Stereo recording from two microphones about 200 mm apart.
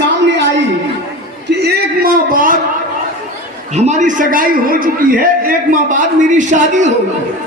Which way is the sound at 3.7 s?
35° right (ahead or behind).